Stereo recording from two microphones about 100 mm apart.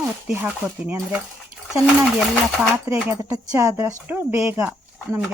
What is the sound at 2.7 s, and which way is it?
Speech, 25° right (ahead or behind).